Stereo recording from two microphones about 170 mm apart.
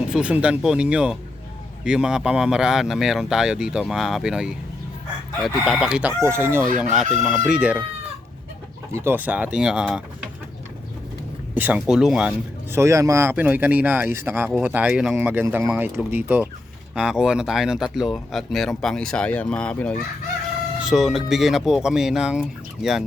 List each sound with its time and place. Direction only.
0.1 s speech: 5° right (ahead or behind)
5.6 s speech: 5° right (ahead or behind)
6.7 s speech: centre (ahead or behind)
8.9 s speech: 15° right (ahead or behind)
11.5 s speech: 10° right (ahead or behind)
12.7 s speech: 15° right (ahead or behind)